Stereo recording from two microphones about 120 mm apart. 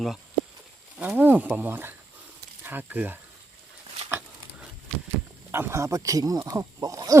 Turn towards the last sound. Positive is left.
turn(degrees=-30)  # may be behind; listen again after turning